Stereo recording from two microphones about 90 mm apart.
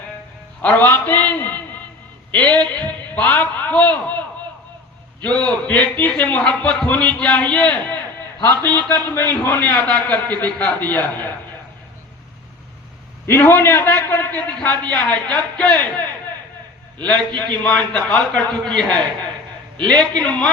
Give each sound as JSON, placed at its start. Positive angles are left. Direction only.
{"t": 0.6, "sound": "a man's voice", "side_deg": 20}
{"t": 2.3, "sound": "a sound", "side_deg": 15}
{"t": 5.2, "sound": "a man's voice", "side_deg": 15}
{"t": 13.2, "sound": "a man's voice", "side_deg": 20}